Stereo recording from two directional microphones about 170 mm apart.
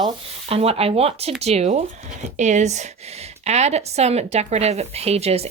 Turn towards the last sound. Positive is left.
turn(degrees=-35)  # may be behind; listen again after turning